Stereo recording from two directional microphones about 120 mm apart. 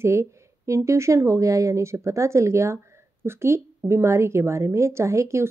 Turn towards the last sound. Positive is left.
turn(degrees=-25)  # may be behind; listen again after turning